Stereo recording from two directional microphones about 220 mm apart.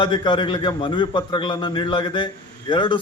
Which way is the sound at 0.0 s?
20° left (ahead or behind).